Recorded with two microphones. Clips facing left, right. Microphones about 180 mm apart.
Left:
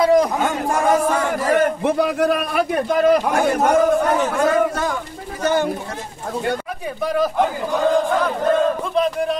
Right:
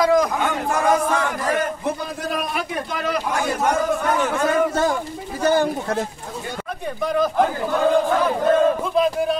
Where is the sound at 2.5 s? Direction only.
45° left (ahead or behind).